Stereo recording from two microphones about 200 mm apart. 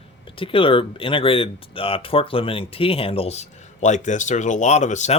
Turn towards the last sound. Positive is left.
turn(degrees=35)  # may be behind; listen again after turning